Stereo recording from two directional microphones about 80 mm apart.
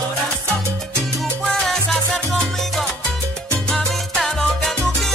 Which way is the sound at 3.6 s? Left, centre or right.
Centre.